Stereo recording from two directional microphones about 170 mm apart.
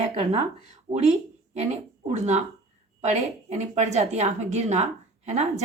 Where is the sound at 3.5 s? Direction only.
40° right (ahead or behind).